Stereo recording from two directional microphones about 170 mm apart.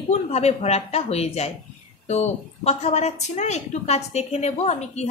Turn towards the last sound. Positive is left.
turn(degrees=40)  # may be behind; listen again after turning